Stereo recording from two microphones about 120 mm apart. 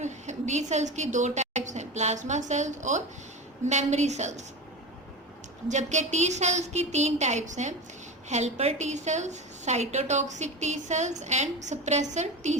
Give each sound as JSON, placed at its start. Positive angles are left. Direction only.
{"t": 0.0, "sound": "a woman's voice", "side_deg": -75}
{"t": 3.7, "sound": "a woman's voice", "side_deg": -70}
{"t": 5.6, "sound": "a woman's voice", "side_deg": -80}
{"t": 8.3, "sound": "a woman's voice", "side_deg": -70}